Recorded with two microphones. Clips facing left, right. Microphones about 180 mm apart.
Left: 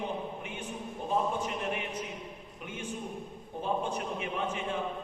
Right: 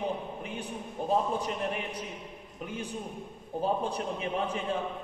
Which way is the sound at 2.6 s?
35° right (ahead or behind).